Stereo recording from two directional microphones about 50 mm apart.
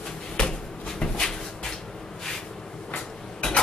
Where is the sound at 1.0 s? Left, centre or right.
Centre.